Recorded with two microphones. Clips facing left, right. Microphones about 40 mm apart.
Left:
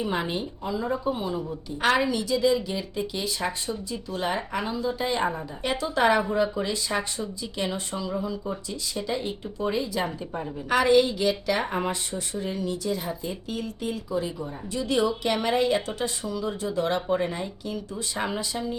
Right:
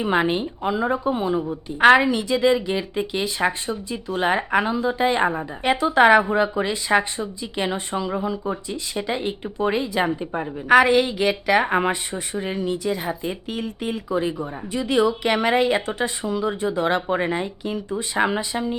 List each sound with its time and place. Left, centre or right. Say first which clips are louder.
0.0 s a woman's voice: right 7 dB; right
0.9 s a woman's voice: right 6 dB; right